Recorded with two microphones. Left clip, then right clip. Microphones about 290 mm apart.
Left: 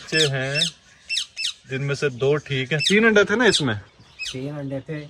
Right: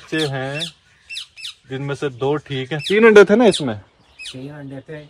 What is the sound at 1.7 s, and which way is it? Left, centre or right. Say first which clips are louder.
Speech: right 1 dB; centre.